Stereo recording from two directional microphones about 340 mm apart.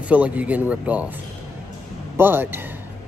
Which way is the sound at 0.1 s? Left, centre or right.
Centre.